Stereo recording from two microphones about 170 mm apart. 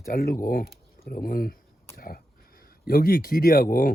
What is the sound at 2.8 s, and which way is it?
Speech, 60° left (ahead or behind).